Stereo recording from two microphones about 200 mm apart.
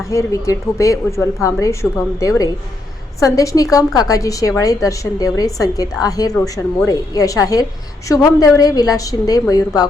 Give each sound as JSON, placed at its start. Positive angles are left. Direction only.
{"t": 0.1, "sound": "a woman's voice", "side_deg": 15}